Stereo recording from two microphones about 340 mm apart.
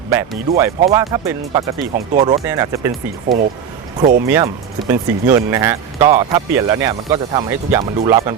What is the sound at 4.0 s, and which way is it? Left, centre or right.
Speech, right.